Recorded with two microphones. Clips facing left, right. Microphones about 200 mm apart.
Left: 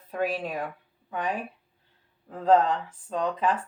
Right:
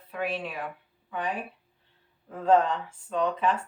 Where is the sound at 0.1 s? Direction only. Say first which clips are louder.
Left 3 dB; 40° left (ahead or behind).